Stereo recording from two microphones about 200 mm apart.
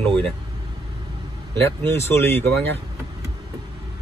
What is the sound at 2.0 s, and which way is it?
Speech, 10° left (ahead or behind).